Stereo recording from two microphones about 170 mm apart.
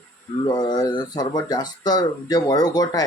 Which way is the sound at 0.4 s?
25° left (ahead or behind).